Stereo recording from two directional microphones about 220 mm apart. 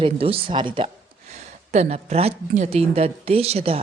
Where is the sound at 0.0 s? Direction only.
25° right (ahead or behind).